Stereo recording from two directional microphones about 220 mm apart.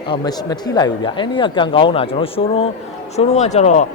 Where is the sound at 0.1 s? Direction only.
15° left (ahead or behind).